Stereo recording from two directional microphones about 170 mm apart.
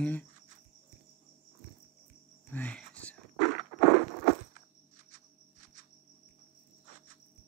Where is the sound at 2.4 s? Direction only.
10° left (ahead or behind).